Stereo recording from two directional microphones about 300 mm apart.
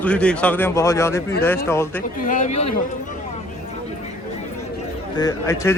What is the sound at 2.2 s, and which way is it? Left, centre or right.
Speech, left.